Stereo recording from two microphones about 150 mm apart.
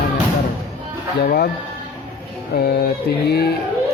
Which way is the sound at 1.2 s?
90° left.